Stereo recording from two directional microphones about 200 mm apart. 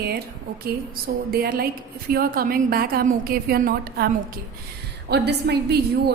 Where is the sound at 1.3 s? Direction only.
50° right (ahead or behind).